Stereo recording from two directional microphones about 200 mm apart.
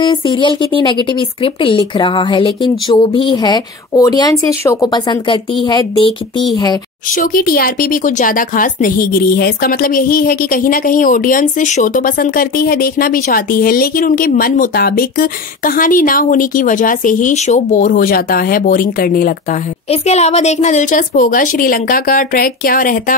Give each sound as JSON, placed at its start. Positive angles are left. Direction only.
{"t": 0.0, "sound": "a woman's voice", "side_deg": 25}
{"t": 7.1, "sound": "speech", "side_deg": 45}
{"t": 19.9, "sound": "speech", "side_deg": 35}